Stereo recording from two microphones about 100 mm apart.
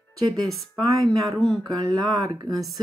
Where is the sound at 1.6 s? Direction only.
45° right (ahead or behind).